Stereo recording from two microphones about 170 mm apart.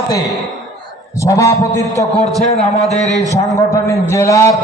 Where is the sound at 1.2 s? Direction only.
20° left (ahead or behind).